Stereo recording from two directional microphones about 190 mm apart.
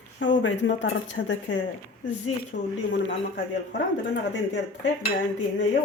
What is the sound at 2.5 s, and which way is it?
Speech, 60° left (ahead or behind).